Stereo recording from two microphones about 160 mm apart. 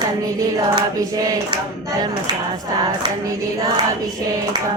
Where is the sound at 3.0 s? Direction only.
25° right (ahead or behind).